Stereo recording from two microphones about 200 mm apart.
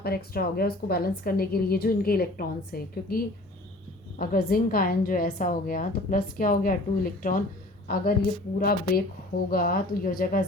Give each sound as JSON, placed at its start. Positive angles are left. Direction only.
{"t": 0.0, "sound": "a woman's voice", "side_deg": 50}